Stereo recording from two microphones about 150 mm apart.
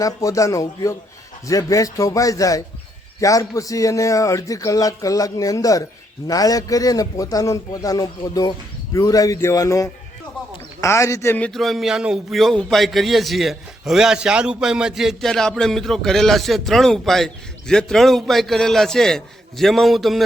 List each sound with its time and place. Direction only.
0.0 s a man's voice: 20° left (ahead or behind); by 20.2 s centre (ahead or behind)